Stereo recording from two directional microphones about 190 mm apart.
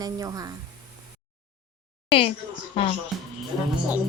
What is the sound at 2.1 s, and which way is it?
Speech, 30° left (ahead or behind).